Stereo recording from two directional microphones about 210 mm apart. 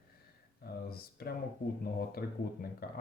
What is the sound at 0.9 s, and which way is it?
Speech, 45° left (ahead or behind).